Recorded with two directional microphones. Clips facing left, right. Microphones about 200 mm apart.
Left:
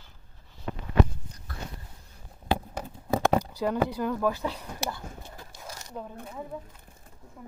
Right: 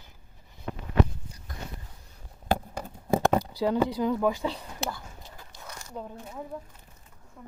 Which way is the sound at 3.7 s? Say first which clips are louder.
Right 3 dB; 15° right (ahead or behind).